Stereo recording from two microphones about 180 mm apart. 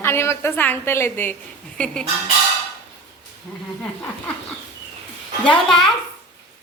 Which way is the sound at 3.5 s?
5° left (ahead or behind).